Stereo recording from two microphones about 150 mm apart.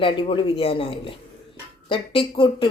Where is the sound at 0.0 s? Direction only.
35° left (ahead or behind).